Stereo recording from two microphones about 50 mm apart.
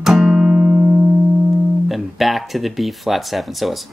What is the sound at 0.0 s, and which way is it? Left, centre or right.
Music, centre.